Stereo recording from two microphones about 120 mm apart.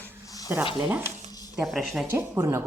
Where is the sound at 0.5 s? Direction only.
20° right (ahead or behind).